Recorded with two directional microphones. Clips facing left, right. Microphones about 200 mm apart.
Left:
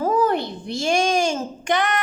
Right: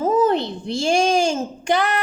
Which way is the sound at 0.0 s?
20° right (ahead or behind).